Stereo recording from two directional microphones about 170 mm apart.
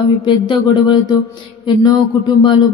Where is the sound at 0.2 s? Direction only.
30° left (ahead or behind).